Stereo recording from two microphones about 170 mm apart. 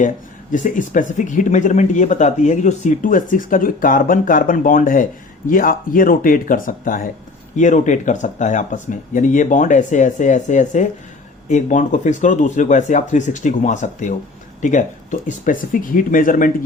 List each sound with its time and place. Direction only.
0.5 s speech: 50° left (ahead or behind)